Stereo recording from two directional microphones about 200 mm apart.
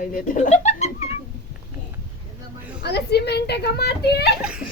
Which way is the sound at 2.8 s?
55° left (ahead or behind).